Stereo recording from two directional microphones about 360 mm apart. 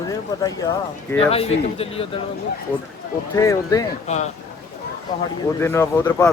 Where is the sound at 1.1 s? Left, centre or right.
Centre.